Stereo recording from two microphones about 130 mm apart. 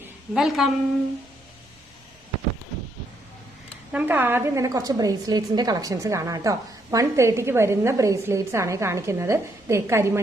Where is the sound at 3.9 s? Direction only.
10° right (ahead or behind).